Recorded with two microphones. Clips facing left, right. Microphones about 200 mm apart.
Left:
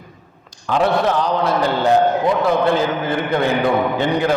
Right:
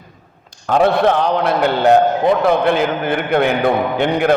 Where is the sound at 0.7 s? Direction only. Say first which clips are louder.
Right 3 dB; 55° right (ahead or behind).